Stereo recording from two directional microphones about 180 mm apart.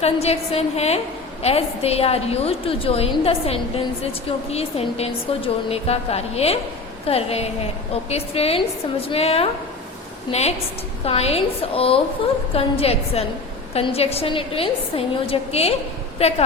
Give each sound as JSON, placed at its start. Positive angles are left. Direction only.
{"t": 0.0, "sound": "a woman's voice", "side_deg": 35}
{"t": 11.0, "sound": "a woman's voice", "side_deg": 35}